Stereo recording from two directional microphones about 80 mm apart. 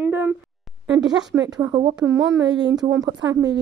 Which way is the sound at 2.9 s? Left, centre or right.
Right.